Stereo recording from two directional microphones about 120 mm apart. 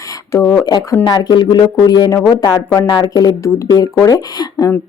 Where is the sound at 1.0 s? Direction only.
40° left (ahead or behind).